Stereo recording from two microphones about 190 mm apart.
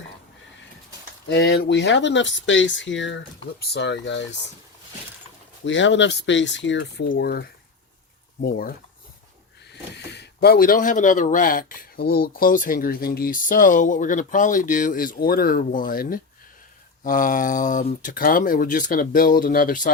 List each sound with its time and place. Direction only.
1.3 s speech: 60° left (ahead or behind)
3.6 s speech: 60° left (ahead or behind)
5.6 s speech: 75° left (ahead or behind); by 8.7 s 50° left (ahead or behind)
9.7 s speech: 60° left (ahead or behind); by 19.9 s 45° left (ahead or behind)